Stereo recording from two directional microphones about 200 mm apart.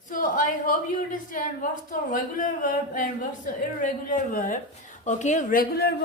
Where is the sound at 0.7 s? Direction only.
40° left (ahead or behind).